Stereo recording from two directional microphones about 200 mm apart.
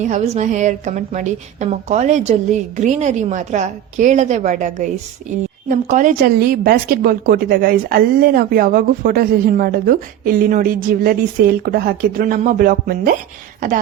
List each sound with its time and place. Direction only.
0.0 s a woman's voice: 35° right (ahead or behind)